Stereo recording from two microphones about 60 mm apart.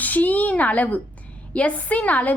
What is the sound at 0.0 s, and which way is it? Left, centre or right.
A woman's voice, left.